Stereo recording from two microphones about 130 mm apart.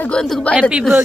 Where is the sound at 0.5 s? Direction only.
10° right (ahead or behind).